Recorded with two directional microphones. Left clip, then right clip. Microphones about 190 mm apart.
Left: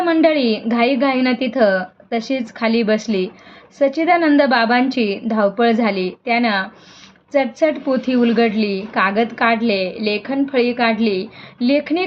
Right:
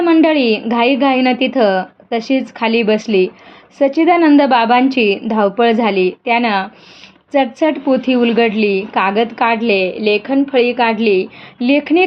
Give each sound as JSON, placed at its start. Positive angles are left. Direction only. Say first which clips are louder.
{"t": 0.0, "sound": "a woman's voice", "louder": "right 3 dB", "side_deg": -30}